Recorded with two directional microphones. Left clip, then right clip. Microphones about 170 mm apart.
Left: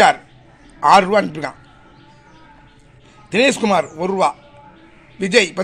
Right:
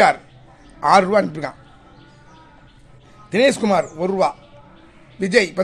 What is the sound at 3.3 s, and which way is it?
A man's voice, 5° right (ahead or behind).